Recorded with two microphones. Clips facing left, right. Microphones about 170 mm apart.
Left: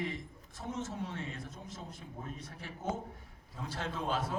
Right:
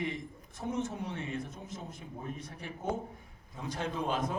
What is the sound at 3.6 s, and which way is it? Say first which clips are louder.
Speech: right 3 dB; 15° right (ahead or behind).